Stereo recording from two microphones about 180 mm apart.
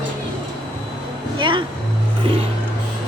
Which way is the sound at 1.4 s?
25° right (ahead or behind).